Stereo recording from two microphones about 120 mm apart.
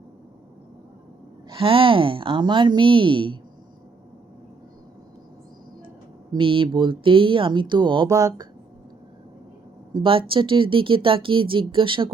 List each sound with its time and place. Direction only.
1.5 s speech: 50° right (ahead or behind)
6.3 s speech: 45° right (ahead or behind)
8.0 s speech: 30° right (ahead or behind)
9.9 s speech: 45° right (ahead or behind)